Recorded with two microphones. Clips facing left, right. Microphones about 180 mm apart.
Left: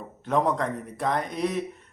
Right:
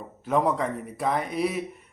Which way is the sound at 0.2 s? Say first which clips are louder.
Even; 5° right (ahead or behind).